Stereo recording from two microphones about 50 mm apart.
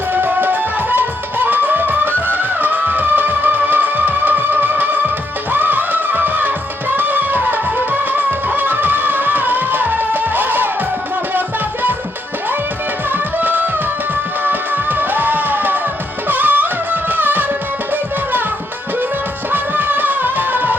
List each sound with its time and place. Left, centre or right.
0.1 s music: right
13.4 s music: right
19.5 s music: right